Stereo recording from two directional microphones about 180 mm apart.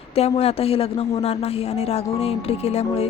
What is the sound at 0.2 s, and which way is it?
Speech, 35° left (ahead or behind).